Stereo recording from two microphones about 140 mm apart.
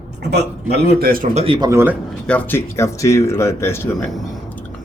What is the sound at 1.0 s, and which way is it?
Speech, 90° right.